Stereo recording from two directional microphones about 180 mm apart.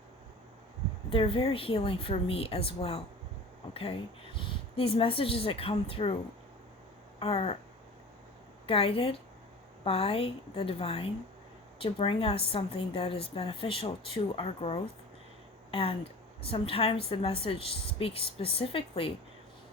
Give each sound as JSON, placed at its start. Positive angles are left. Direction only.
{"t": 1.1, "sound": "a woman's voice", "side_deg": 30}
{"t": 4.4, "sound": "a woman's voice", "side_deg": 30}
{"t": 7.2, "sound": "a woman's voice", "side_deg": 35}
{"t": 8.6, "sound": "a woman's voice", "side_deg": 30}